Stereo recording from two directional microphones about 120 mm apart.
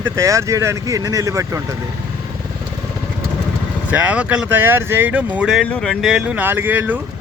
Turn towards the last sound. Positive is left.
turn(degrees=-15)  # may be behind; listen again after turning